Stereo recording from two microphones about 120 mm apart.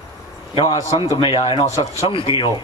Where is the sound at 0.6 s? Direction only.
45° left (ahead or behind).